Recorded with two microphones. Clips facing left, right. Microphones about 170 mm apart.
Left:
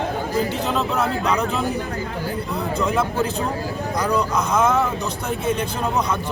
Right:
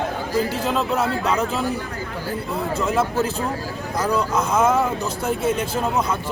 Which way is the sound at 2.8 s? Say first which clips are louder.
Even; 5° right (ahead or behind).